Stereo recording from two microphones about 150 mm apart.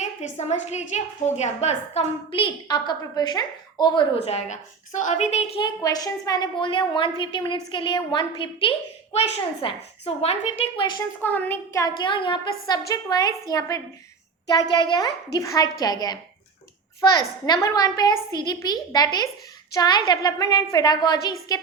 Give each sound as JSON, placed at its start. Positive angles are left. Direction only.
{"t": 0.0, "sound": "a woman's voice", "side_deg": 50}
{"t": 5.5, "sound": "a woman's voice", "side_deg": 30}
{"t": 11.2, "sound": "a child's voice", "side_deg": 10}